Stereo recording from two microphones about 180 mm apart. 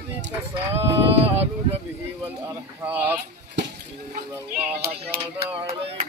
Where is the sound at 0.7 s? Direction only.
35° right (ahead or behind).